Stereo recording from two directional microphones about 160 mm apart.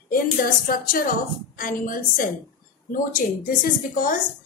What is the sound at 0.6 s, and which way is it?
A woman's voice, 60° left (ahead or behind).